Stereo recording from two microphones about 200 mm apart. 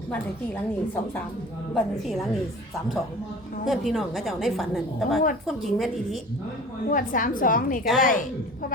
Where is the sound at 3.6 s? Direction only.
Centre (ahead or behind).